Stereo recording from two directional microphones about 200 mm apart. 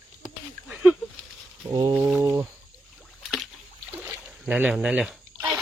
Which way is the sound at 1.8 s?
15° right (ahead or behind).